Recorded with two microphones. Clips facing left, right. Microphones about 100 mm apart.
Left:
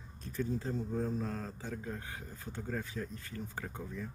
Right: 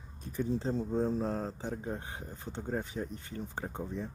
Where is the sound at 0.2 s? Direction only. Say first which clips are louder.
Right 3 dB; 15° right (ahead or behind).